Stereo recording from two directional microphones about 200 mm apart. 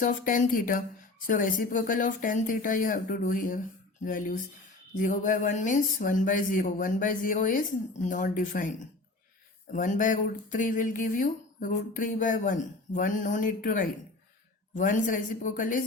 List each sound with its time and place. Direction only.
0.0 s speech: 40° left (ahead or behind)